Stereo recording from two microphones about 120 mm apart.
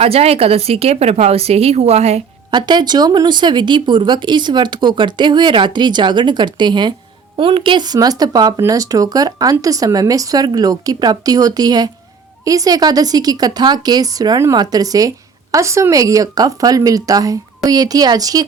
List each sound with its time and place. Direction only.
0.0 s speech: 55° right (ahead or behind)
2.5 s speech: 40° right (ahead or behind)